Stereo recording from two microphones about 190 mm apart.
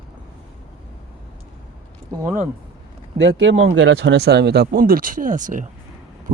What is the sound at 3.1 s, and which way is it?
Speech, 70° right (ahead or behind).